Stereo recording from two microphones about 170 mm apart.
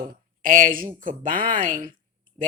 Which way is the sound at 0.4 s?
50° right (ahead or behind).